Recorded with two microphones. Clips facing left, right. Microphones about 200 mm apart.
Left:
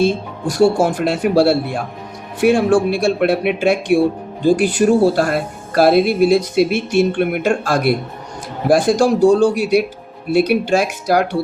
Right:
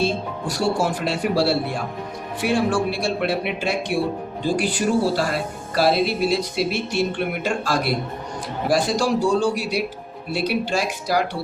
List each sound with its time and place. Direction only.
0.4 s speech: 50° left (ahead or behind)